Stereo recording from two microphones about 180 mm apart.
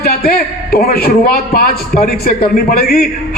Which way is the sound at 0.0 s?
60° left (ahead or behind).